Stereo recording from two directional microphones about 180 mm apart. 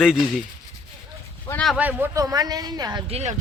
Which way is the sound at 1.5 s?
5° left (ahead or behind).